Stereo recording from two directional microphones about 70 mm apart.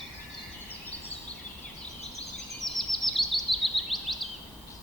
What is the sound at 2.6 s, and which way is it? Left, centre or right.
Bird vocalization, centre.